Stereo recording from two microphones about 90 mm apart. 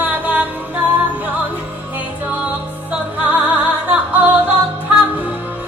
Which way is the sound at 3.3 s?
15° right (ahead or behind).